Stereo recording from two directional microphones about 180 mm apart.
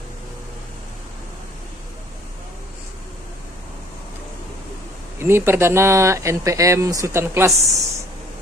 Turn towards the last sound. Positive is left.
turn(degrees=-15)  # may be behind; listen again after turning